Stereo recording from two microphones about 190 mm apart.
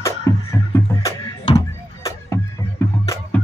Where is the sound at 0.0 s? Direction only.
15° left (ahead or behind).